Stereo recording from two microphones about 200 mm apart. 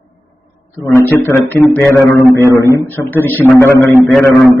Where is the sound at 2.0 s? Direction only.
15° left (ahead or behind).